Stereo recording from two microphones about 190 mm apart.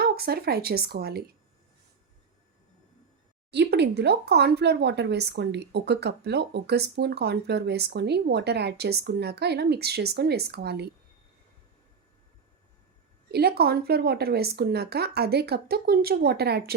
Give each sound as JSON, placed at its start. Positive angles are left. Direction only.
{"t": 0.0, "sound": "speech", "side_deg": -55}
{"t": 3.5, "sound": "speech", "side_deg": -60}
{"t": 13.3, "sound": "speech", "side_deg": -55}